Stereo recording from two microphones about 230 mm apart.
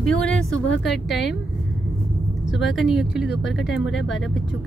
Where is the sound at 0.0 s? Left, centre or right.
Centre.